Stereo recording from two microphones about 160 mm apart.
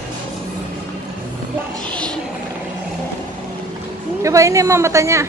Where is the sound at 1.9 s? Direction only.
5° left (ahead or behind).